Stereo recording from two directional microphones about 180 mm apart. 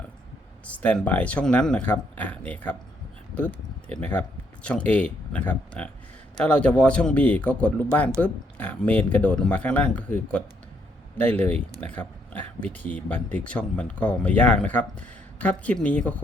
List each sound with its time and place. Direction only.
0.6 s speech: 10° left (ahead or behind)